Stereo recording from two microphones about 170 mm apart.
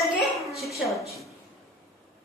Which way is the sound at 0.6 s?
Centre (ahead or behind).